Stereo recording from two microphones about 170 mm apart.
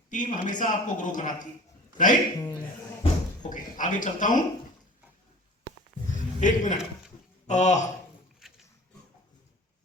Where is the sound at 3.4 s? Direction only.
50° left (ahead or behind).